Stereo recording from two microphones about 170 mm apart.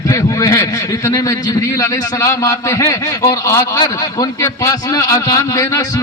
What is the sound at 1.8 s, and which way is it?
A man's voice, 20° left (ahead or behind).